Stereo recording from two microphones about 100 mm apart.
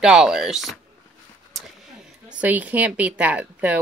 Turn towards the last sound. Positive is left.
turn(degrees=-15)  # may be behind; listen again after turning